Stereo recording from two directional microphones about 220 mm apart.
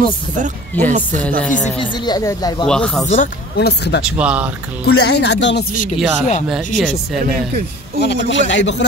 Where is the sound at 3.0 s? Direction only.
30° left (ahead or behind).